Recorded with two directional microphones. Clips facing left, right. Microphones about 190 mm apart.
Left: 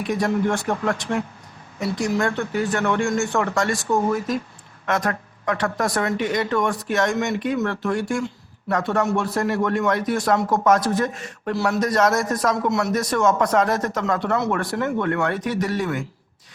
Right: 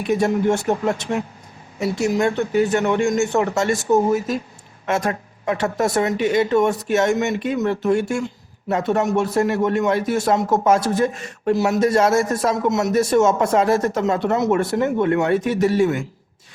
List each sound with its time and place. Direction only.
0.1 s speech: 25° right (ahead or behind)